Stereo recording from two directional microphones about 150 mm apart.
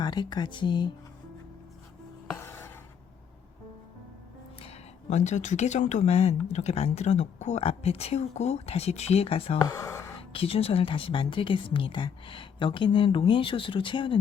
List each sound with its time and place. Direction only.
0.0 s speech: 30° left (ahead or behind)
2.4 s a sound: 15° left (ahead or behind)
4.6 s speech: 50° left (ahead or behind)
9.6 s speech: 25° left (ahead or behind)
10.3 s a woman's voice: 40° left (ahead or behind)